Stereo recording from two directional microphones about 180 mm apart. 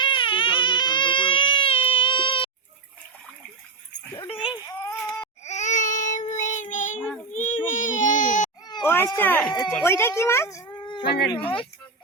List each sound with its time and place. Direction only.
0.0 s baby cry: 25° left (ahead or behind)
4.2 s dog: 30° left (ahead or behind)
4.8 s a sound: 20° left (ahead or behind)
5.4 s child singing: 40° left (ahead or behind)
7.3 s a sound: 45° left (ahead or behind)
8.6 s children playing: 20° left (ahead or behind)
9.0 s speech: 10° left (ahead or behind)